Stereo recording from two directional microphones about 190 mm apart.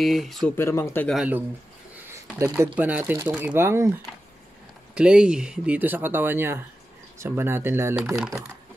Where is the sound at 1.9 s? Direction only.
15° right (ahead or behind).